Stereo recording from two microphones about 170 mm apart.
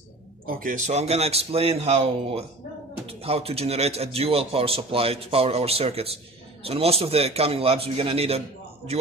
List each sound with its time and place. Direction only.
0.5 s speech: 55° right (ahead or behind); by 8.4 s 35° right (ahead or behind)